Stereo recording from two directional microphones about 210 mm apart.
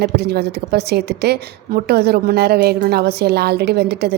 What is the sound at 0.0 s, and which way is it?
A woman's voice, 50° right (ahead or behind).